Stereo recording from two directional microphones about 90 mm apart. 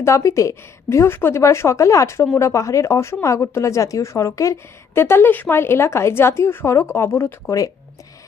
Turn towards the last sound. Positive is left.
turn(degrees=35)  # may be behind; listen again after turning